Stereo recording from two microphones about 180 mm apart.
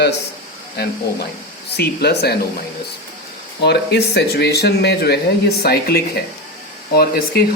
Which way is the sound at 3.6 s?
65° left (ahead or behind).